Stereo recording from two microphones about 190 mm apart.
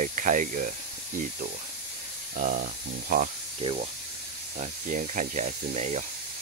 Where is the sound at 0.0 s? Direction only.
40° right (ahead or behind).